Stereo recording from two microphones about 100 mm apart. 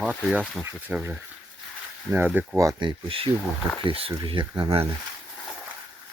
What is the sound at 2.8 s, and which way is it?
Speech, 60° right (ahead or behind).